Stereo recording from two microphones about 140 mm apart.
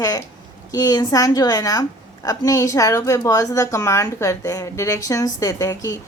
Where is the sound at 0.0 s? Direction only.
25° left (ahead or behind).